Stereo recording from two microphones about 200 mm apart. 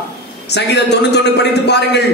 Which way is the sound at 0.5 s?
55° left (ahead or behind).